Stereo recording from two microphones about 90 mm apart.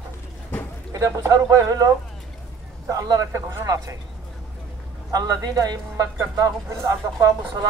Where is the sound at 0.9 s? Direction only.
40° right (ahead or behind).